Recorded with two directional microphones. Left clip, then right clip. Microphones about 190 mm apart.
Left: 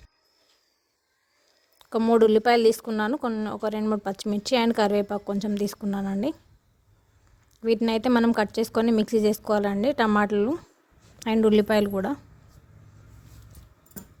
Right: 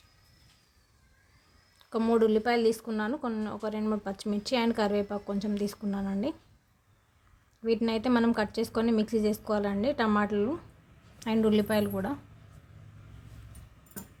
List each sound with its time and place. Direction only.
1.8 s speech: 40° left (ahead or behind)
7.6 s speech: 45° left (ahead or behind)